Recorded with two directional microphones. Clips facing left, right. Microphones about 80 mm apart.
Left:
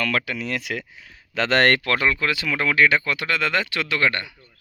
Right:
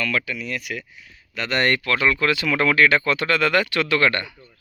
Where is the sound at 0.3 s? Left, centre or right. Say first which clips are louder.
Left 2 dB; left.